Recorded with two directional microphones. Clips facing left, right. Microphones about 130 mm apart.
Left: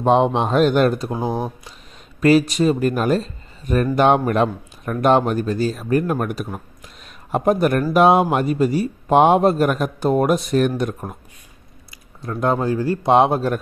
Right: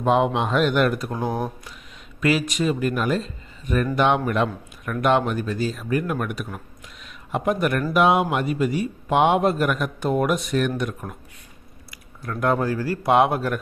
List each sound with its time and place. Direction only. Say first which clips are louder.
0.0 s speech: left 4 dB; 30° left (ahead or behind)
2.1 s speech: left 7 dB; 40° left (ahead or behind)
11.9 s speech: left 3 dB; 25° left (ahead or behind)